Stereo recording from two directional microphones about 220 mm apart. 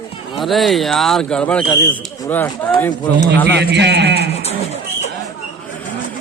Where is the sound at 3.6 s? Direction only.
50° right (ahead or behind).